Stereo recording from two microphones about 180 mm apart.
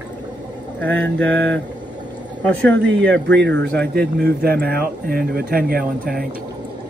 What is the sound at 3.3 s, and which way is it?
Speech, 80° right.